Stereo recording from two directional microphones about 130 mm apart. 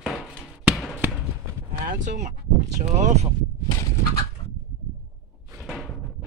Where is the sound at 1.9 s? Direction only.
75° right (ahead or behind).